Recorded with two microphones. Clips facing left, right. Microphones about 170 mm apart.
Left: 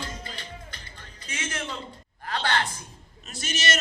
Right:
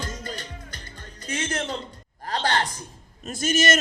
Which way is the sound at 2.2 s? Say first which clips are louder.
Right 2 dB; 40° right (ahead or behind).